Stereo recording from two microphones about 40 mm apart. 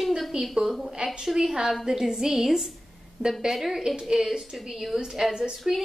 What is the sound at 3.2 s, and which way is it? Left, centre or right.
Speech, right.